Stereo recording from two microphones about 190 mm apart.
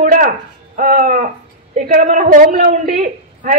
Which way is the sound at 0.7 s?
45° right (ahead or behind).